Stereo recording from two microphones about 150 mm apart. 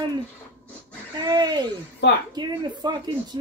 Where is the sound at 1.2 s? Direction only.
30° right (ahead or behind).